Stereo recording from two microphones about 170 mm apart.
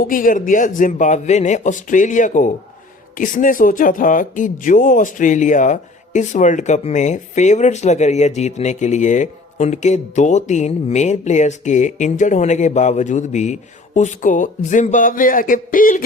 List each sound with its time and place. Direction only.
0.0 s speech: 55° left (ahead or behind)